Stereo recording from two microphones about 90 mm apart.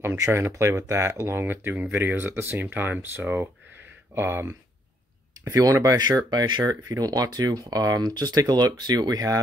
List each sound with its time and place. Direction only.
0.2 s speech: 30° right (ahead or behind)
5.4 s speech: 40° right (ahead or behind); by 6.6 s 55° right (ahead or behind)
6.6 s speech: 40° right (ahead or behind)